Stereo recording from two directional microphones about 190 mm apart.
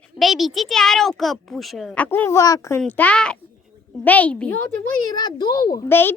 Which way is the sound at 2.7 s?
5° left (ahead or behind).